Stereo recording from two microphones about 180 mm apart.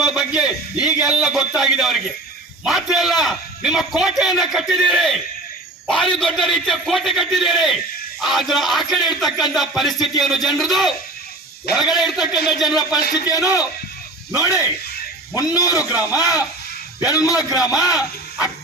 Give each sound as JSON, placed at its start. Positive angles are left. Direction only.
{"t": 0.0, "sound": "speech", "side_deg": -5}
{"t": 13.2, "sound": "a man's voice", "side_deg": 20}
{"t": 15.4, "sound": "a man's voice", "side_deg": 20}
{"t": 15.9, "sound": "speech", "side_deg": -10}
{"t": 16.1, "sound": "a man's voice", "side_deg": 20}
{"t": 17.9, "sound": "speech", "side_deg": -5}